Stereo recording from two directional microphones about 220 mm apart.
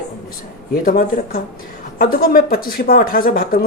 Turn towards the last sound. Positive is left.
turn(degrees=40)  # may be behind; listen again after turning